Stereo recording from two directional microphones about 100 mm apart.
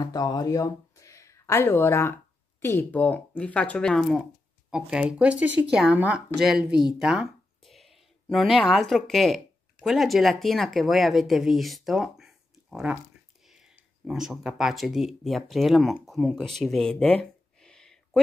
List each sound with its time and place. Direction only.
0.0 s speech: 40° left (ahead or behind); by 4.2 s 5° left (ahead or behind)
4.6 s speech: 5° right (ahead or behind)